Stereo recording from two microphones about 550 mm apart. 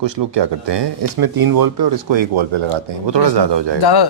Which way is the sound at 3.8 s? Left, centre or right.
Left.